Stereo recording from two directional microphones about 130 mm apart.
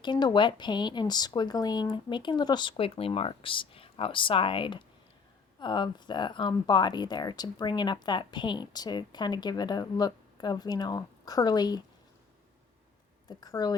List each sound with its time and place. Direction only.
0.0 s speech: 35° left (ahead or behind)
13.2 s speech: 30° left (ahead or behind)